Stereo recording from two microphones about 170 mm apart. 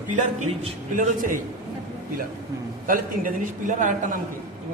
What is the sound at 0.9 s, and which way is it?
Speech, 50° right (ahead or behind).